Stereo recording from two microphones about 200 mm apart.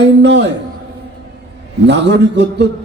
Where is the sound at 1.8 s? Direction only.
60° right (ahead or behind).